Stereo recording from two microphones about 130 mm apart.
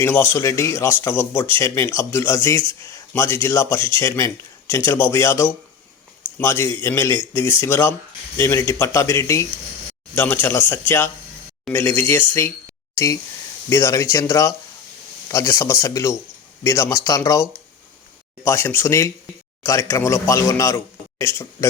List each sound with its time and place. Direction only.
0.0 s speech: 15° left (ahead or behind)
13.7 s speech: 20° left (ahead or behind)
18.4 s speech: 20° left (ahead or behind)